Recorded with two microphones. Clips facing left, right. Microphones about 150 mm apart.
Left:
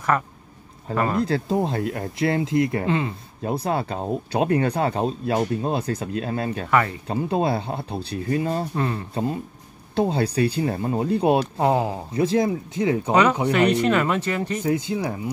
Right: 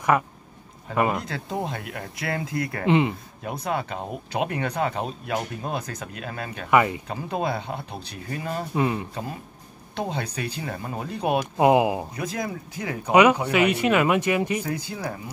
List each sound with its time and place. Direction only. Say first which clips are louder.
0.9 s speech: left 1 dB; 15° right (ahead or behind)
1.2 s speech: left 8 dB; 30° left (ahead or behind)
2.9 s speech: right 3 dB; 20° right (ahead or behind)
3.4 s speech: left 4 dB; 30° left (ahead or behind)
6.7 s speech: right 2 dB; 15° right (ahead or behind)
7.1 s speech: left 5 dB; 30° left (ahead or behind)
8.7 s speech: right 2 dB; 10° right (ahead or behind)
9.9 s speech: left 8 dB; 30° left (ahead or behind)
11.5 s speech: right 3 dB; 15° right (ahead or behind)
12.1 s speech: left 9 dB; 30° left (ahead or behind)
13.1 s speech: right 4 dB; 15° right (ahead or behind)
14.6 s speech: left 7 dB; 20° left (ahead or behind)